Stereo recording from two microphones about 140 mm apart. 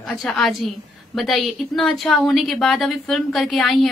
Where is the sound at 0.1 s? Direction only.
Centre (ahead or behind).